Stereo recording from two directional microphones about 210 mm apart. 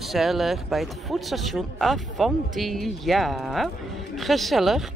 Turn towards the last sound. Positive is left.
turn(degrees=0)  # may be behind; listen again after turning